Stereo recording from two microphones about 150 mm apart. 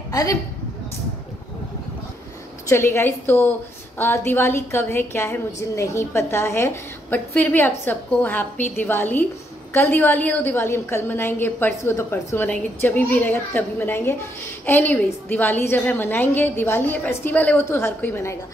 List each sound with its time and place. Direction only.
0.1 s a woman's voice: 25° left (ahead or behind)
2.7 s a woman's voice: 15° left (ahead or behind)